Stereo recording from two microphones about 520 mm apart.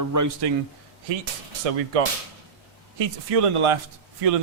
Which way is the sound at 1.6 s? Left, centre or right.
Right.